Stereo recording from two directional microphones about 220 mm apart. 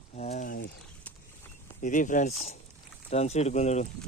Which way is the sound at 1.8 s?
35° left (ahead or behind).